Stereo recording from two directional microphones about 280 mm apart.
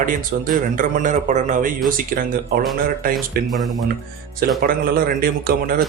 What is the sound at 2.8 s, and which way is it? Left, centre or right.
Speech, right.